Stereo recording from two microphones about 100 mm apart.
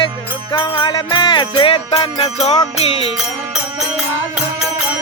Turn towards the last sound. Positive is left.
turn(degrees=80)